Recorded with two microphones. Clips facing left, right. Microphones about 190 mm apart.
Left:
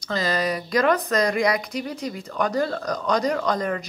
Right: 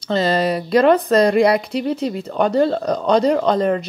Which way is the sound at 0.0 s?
30° right (ahead or behind).